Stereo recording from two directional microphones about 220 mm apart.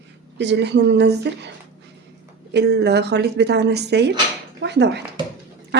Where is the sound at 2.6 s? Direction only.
50° right (ahead or behind).